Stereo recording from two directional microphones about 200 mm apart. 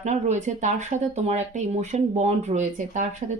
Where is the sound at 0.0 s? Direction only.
35° right (ahead or behind).